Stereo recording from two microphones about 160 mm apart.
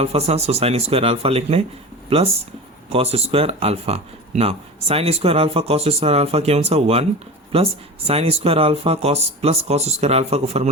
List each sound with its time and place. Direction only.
0.0 s speech: 40° right (ahead or behind)